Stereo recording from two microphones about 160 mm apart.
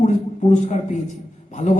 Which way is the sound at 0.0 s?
50° left (ahead or behind).